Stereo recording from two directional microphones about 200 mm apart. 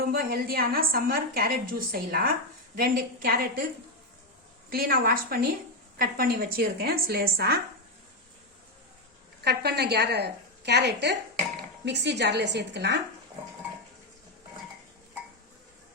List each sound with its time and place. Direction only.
0.0 s a woman's voice: 50° right (ahead or behind)
4.7 s a woman's voice: 45° right (ahead or behind)
9.4 s a woman's voice: 55° right (ahead or behind)